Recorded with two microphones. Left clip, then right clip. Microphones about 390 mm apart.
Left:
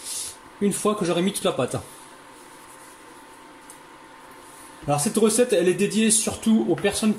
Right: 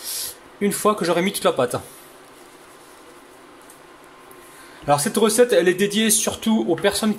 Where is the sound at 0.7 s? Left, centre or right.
Right.